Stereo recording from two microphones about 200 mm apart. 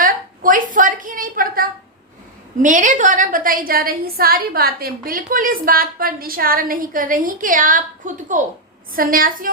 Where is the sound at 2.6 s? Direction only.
40° right (ahead or behind).